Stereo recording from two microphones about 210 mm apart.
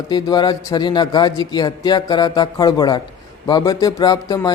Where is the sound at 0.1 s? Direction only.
20° left (ahead or behind).